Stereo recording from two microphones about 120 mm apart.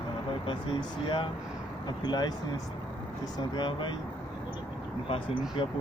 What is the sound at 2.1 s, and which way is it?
Speech, 35° left (ahead or behind).